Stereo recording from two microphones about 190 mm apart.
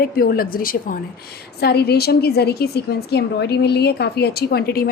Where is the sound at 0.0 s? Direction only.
50° left (ahead or behind).